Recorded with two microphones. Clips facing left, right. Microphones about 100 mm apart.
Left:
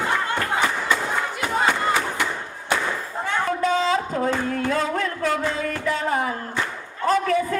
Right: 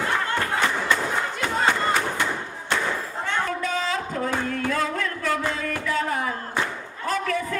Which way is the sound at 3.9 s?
25° left (ahead or behind).